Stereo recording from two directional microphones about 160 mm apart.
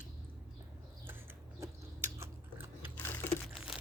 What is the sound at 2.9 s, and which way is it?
Computer keyboard, 10° left (ahead or behind).